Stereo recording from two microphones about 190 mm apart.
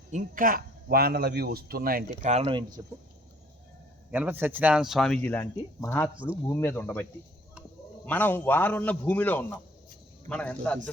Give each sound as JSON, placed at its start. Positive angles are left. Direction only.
{"t": 0.1, "sound": "speech", "side_deg": -45}
{"t": 2.3, "sound": "speech", "side_deg": -30}
{"t": 4.1, "sound": "a man's voice", "side_deg": -10}
{"t": 8.0, "sound": "a man's voice", "side_deg": 10}